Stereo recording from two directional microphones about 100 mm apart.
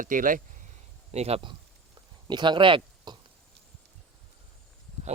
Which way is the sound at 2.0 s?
45° right (ahead or behind).